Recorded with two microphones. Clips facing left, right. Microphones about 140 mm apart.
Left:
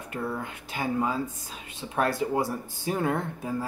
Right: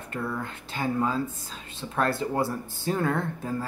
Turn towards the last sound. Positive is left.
turn(degrees=15)  # may be behind; listen again after turning